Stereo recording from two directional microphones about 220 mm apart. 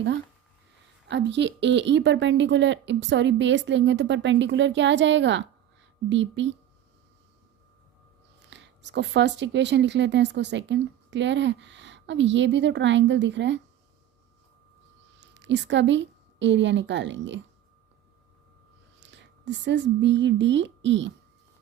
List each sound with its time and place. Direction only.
1.0 s speech: 55° right (ahead or behind)
8.4 s speech: 50° right (ahead or behind)
15.2 s a woman's voice: 55° right (ahead or behind)
18.9 s speech: 55° right (ahead or behind)